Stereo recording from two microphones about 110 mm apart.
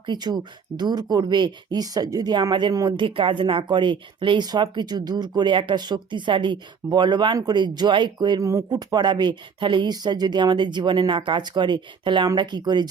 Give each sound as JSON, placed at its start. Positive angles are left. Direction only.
{"t": 0.0, "sound": "speech", "side_deg": -40}